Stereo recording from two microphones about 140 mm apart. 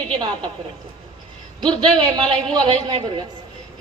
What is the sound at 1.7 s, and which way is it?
A woman's voice, 35° right (ahead or behind).